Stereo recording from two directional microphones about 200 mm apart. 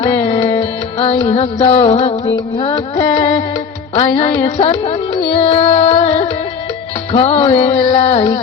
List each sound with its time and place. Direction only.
0.0 s music: 30° left (ahead or behind)